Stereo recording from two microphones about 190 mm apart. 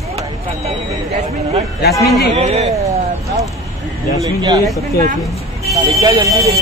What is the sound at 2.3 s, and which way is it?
Speech, 35° right (ahead or behind).